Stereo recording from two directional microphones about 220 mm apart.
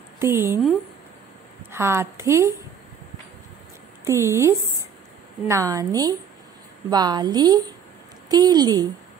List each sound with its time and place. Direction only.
0.2 s a woman's voice: 10° right (ahead or behind)
1.7 s a woman's voice: 10° right (ahead or behind)
4.0 s a woman's voice: 10° right (ahead or behind)